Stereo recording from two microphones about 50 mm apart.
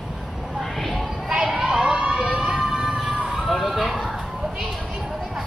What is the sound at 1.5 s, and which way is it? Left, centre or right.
Emergency vehicle, centre.